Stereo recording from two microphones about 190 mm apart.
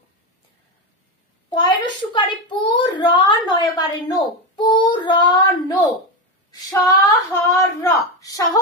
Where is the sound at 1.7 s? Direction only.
25° left (ahead or behind).